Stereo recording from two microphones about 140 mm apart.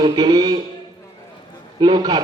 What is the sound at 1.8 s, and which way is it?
Speech, 30° right (ahead or behind).